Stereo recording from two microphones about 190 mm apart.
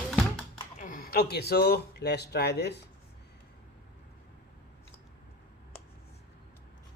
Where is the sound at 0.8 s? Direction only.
50° left (ahead or behind).